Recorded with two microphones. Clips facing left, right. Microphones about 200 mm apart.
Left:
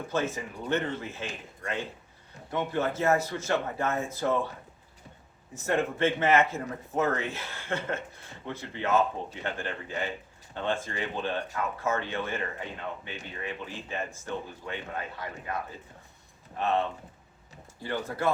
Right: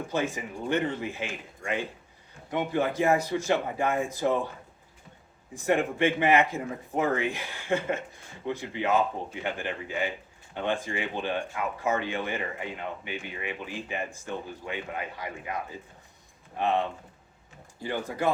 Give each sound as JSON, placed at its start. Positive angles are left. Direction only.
{"t": 0.1, "sound": "speech", "side_deg": -15}
{"t": 2.5, "sound": "speech", "side_deg": -15}
{"t": 5.5, "sound": "speech", "side_deg": -15}
{"t": 16.6, "sound": "speech", "side_deg": -15}
{"t": 18.2, "sound": "speech", "side_deg": -15}